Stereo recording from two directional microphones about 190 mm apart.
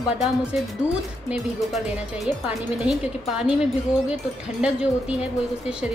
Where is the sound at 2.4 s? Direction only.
5° right (ahead or behind).